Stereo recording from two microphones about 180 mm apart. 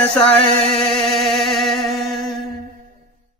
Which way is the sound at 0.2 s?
30° left (ahead or behind).